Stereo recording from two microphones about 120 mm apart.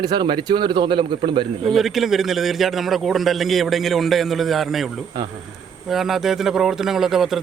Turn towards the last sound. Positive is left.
turn(degrees=0)  # may be behind; listen again after turning